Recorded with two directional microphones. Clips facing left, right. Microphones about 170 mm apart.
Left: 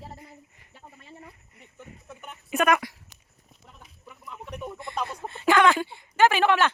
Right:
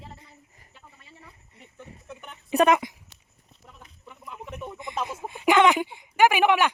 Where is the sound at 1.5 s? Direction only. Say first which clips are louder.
Right 2 dB; 30° right (ahead or behind).